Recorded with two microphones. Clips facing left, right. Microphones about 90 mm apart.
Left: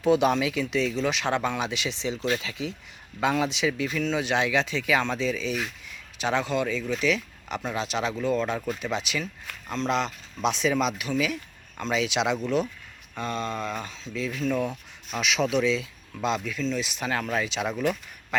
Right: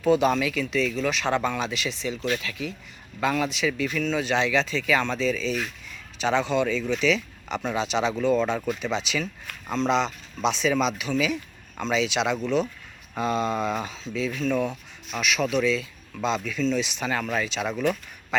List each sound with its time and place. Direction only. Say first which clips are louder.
0.0 s speech: right 1 dB; 15° left (ahead or behind)
13.1 s speech: right 5 dB; 10° right (ahead or behind); by 15.2 s 5° left (ahead or behind)
15.2 s speech: even; 20° left (ahead or behind)